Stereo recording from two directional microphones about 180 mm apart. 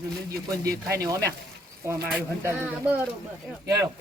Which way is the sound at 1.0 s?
20° right (ahead or behind).